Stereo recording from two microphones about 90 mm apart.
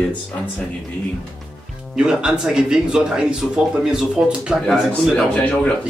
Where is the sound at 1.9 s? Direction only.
10° right (ahead or behind).